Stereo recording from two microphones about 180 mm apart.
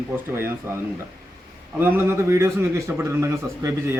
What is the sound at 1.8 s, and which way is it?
A man's voice, 15° right (ahead or behind).